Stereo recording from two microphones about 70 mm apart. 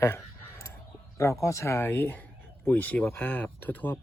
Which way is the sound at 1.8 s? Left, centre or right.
Left.